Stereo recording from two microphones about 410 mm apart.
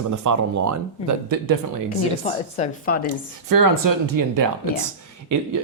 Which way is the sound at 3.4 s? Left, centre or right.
Right.